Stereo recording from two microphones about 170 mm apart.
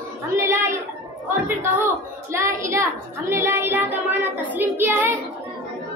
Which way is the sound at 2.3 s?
15° right (ahead or behind).